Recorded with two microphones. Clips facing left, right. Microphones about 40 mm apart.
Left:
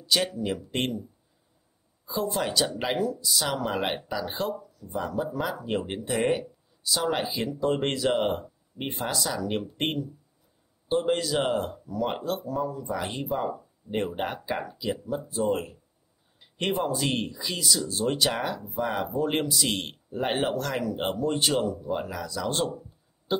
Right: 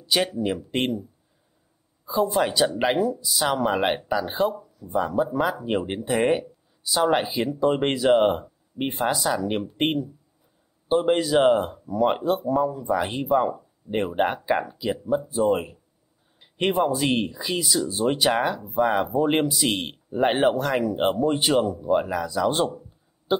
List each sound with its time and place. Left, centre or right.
0.0 s speech: centre
2.0 s speech: centre
6.2 s speech: centre
6.8 s speech: centre
13.4 s speech: centre
13.8 s speech: centre
16.3 s a sound: centre
17.0 s speech: centre